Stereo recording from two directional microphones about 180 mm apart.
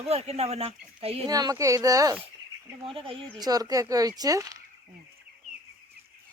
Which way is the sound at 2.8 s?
30° right (ahead or behind).